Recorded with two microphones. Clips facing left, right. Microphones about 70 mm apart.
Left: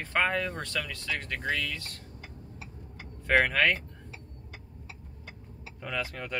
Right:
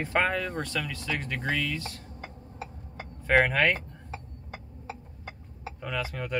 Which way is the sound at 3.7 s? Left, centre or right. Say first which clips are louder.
Right 4 dB; right.